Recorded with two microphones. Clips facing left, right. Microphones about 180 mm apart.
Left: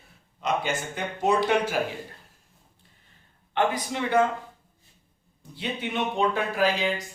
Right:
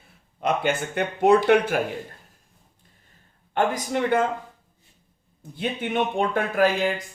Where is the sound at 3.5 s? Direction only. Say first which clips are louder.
Right 2 dB; 45° right (ahead or behind).